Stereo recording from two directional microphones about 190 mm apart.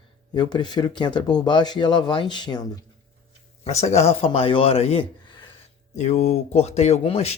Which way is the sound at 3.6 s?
35° left (ahead or behind).